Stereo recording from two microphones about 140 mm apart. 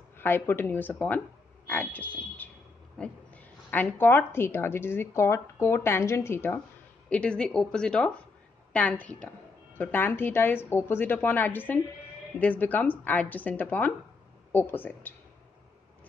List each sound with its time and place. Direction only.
0.2 s a woman's voice: 15° left (ahead or behind)